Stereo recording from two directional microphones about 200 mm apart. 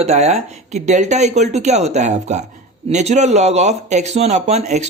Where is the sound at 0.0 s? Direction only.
35° right (ahead or behind).